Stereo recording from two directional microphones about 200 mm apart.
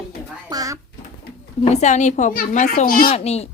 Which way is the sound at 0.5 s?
15° right (ahead or behind).